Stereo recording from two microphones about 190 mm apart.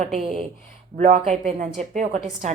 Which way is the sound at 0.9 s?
40° right (ahead or behind).